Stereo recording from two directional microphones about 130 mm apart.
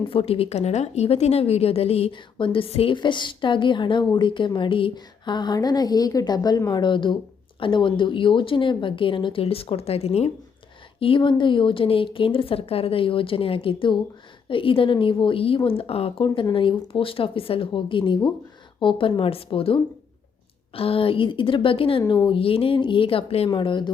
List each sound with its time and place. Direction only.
0.1 s a woman's voice: 45° left (ahead or behind)
11.0 s a woman's voice: 40° left (ahead or behind)
23.5 s a woman's voice: 35° left (ahead or behind)